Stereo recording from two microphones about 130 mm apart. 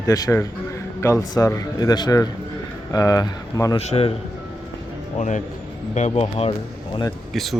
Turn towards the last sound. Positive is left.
turn(degrees=0)  # may be behind; listen again after turning